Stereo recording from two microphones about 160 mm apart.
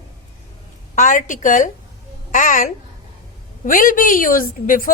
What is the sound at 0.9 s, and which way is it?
A woman's voice, 50° left (ahead or behind).